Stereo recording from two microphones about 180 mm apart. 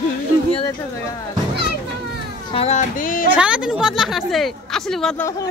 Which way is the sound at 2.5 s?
40° left (ahead or behind).